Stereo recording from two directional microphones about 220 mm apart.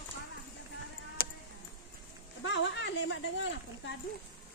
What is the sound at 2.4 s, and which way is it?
Speech, 55° left (ahead or behind).